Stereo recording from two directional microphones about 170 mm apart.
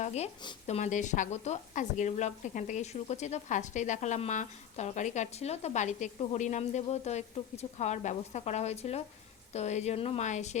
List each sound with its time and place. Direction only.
0.0 s speech: 40° left (ahead or behind)